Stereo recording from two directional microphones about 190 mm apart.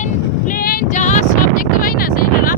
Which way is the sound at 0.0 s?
45° left (ahead or behind).